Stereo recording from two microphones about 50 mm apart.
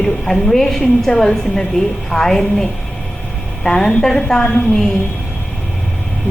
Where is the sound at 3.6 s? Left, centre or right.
Centre.